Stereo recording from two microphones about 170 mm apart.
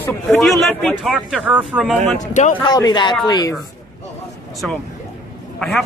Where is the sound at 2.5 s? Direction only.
25° left (ahead or behind).